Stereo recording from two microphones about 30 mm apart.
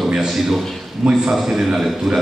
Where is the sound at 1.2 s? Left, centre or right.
Centre.